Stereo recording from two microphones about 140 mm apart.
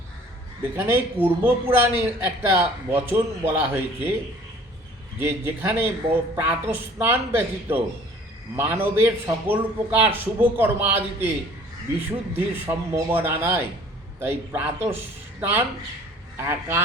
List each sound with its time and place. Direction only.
0.6 s speech: 15° right (ahead or behind)
5.2 s speech: 15° right (ahead or behind)